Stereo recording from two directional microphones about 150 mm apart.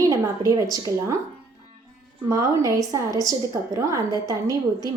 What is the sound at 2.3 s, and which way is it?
A woman's voice, 20° right (ahead or behind).